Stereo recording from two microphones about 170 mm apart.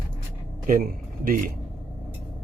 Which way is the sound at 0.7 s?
55° right (ahead or behind).